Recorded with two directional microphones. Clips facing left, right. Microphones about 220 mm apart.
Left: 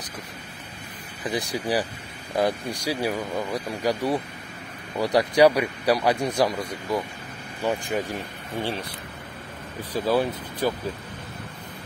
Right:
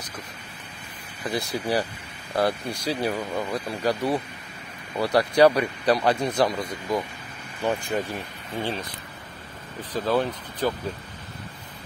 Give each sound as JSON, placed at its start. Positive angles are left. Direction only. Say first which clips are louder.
{"t": 1.2, "sound": "speech", "louder": "even", "side_deg": 15}
{"t": 10.0, "sound": "speech", "louder": "left 1 dB", "side_deg": 10}